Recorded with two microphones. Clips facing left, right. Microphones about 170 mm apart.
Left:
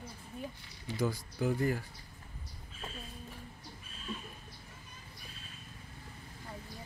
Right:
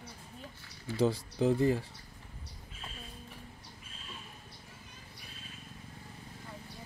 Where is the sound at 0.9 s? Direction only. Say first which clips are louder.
Right 5 dB; 25° right (ahead or behind).